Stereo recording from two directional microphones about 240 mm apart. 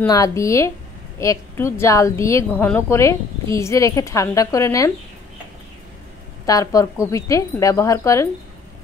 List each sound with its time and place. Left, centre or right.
0.0 s a woman's voice: centre
6.4 s a woman's voice: centre